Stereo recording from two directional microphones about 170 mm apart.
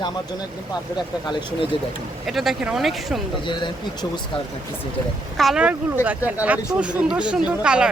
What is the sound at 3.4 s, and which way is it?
Speech, 25° left (ahead or behind).